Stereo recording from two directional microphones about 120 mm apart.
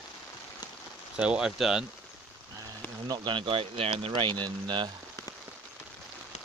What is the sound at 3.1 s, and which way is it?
Speech, 40° right (ahead or behind).